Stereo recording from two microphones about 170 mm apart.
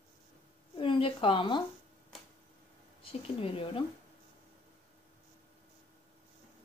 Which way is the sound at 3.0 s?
30° left (ahead or behind).